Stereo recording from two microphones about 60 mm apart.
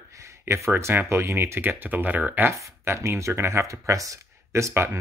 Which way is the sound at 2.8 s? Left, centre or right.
Right.